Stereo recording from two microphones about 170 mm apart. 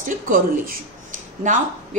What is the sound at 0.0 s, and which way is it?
Speech, 55° right (ahead or behind).